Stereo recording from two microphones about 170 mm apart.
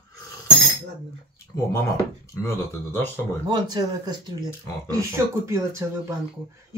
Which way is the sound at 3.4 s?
25° right (ahead or behind).